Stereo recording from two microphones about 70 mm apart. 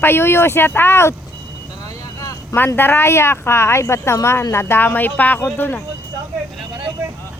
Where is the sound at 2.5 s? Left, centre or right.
Left.